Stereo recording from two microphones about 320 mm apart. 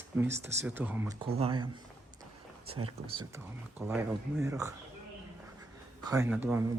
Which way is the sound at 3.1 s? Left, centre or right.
Centre.